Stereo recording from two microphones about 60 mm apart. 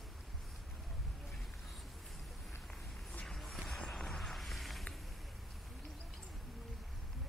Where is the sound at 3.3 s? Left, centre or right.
Centre.